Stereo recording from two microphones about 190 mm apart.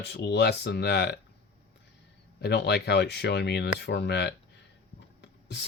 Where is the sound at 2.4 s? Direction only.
60° left (ahead or behind).